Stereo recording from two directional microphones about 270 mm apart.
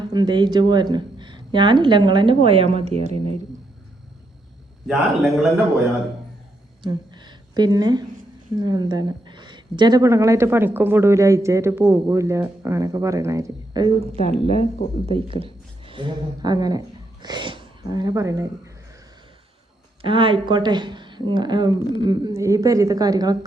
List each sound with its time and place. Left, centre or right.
0.1 s a woman's voice: centre
4.9 s a man's voice: centre
6.8 s a sound: centre
8.5 s a woman's voice: centre
14.8 s speech: left
15.1 s a woman's voice: centre
20.0 s a woman's voice: centre